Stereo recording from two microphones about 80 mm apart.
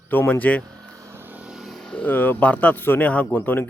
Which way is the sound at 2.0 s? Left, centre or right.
Left.